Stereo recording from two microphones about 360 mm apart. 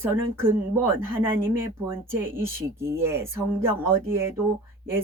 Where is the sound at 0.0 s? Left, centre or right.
Centre.